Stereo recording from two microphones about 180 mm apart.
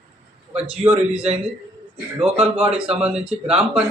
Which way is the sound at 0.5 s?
35° right (ahead or behind).